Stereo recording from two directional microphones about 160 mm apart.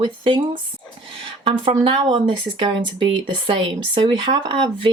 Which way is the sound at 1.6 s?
35° right (ahead or behind).